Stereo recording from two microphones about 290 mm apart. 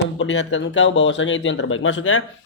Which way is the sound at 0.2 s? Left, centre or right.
Left.